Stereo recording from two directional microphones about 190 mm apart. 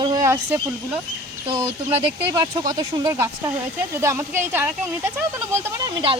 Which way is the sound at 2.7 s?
20° right (ahead or behind).